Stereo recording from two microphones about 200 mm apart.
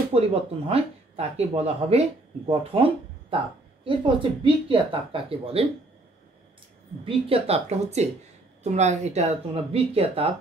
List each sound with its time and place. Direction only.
0.1 s speech: 30° right (ahead or behind)
7.1 s speech: 30° right (ahead or behind)